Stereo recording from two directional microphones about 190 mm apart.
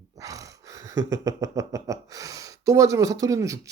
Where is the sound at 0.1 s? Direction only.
15° right (ahead or behind).